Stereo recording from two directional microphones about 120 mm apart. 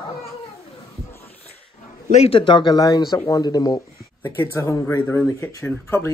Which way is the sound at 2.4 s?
40° left (ahead or behind).